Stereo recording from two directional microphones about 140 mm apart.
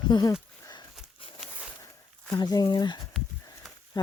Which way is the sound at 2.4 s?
30° left (ahead or behind).